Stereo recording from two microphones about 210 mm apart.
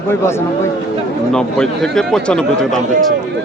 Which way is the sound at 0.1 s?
10° left (ahead or behind).